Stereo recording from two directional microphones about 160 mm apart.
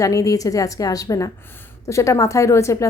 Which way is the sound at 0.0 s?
20° left (ahead or behind).